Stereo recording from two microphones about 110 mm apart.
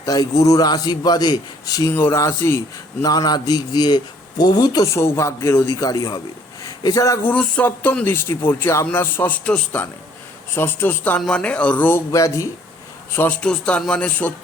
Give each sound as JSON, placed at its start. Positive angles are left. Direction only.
{"t": 0.0, "sound": "a man's voice", "side_deg": 35}
{"t": 1.9, "sound": "speech", "side_deg": 20}
{"t": 3.0, "sound": "a man's voice", "side_deg": 35}
{"t": 7.3, "sound": "speech", "side_deg": 15}
{"t": 13.4, "sound": "speech", "side_deg": 10}